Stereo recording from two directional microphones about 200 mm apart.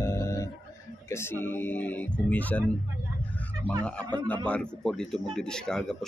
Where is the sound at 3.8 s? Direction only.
5° left (ahead or behind).